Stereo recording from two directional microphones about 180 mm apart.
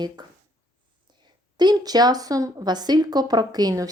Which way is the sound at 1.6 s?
20° right (ahead or behind).